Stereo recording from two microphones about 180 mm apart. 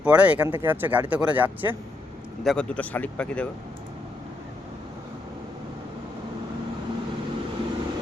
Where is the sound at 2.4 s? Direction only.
5° left (ahead or behind).